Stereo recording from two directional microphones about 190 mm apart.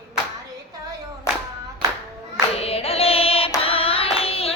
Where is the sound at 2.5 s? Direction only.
30° left (ahead or behind).